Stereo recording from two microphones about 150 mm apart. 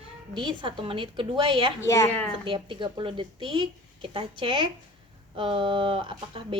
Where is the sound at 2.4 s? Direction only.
35° right (ahead or behind).